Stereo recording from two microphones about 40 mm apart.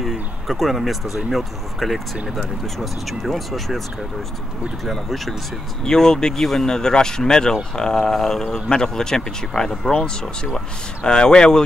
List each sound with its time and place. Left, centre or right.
0.0 s speech: centre
4.8 s speech: centre